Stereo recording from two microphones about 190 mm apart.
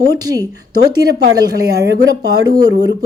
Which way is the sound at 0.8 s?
60° right (ahead or behind).